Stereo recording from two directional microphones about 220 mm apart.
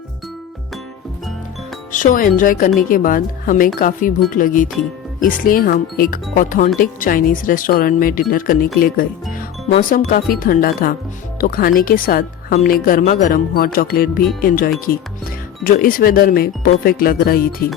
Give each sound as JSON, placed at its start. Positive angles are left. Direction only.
{"t": 1.9, "sound": "speech", "side_deg": 35}